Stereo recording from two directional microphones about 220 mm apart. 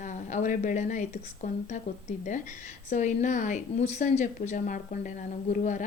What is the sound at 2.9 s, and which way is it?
A woman's voice, 35° left (ahead or behind).